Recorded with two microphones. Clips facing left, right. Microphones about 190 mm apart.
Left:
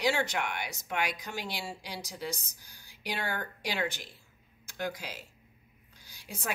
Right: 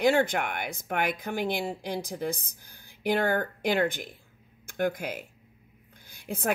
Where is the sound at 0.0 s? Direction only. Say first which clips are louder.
Right 6 dB; 55° right (ahead or behind).